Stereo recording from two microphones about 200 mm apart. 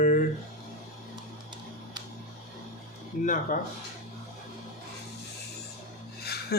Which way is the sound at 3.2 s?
40° left (ahead or behind).